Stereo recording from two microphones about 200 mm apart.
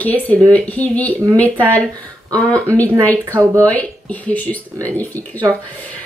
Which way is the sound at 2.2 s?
15° right (ahead or behind).